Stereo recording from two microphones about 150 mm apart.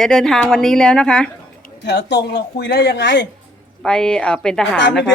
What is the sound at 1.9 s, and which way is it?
Speech, 90° left.